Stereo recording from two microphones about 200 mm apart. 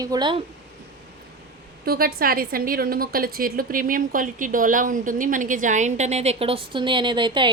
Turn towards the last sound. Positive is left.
turn(degrees=-25)  # may be behind; listen again after turning